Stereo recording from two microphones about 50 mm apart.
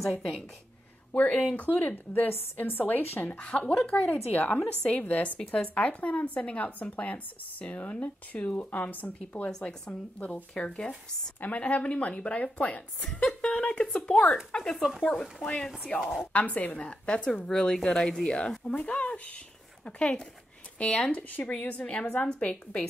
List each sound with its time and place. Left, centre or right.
1.1 s speech: left
2.1 s a woman's voice: left
3.3 s speech: left
4.1 s speech: left
9.5 s speech: centre
11.4 s speech: left
14.8 s a woman's voice: centre
16.3 s speech: left
16.7 s speech: centre
18.9 s speech: left